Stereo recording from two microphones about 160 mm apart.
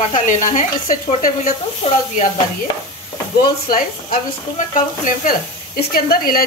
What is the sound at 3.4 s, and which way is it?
Speech, 60° left (ahead or behind).